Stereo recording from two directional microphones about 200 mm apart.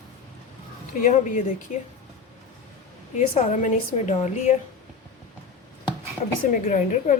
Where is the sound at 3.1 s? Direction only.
35° left (ahead or behind).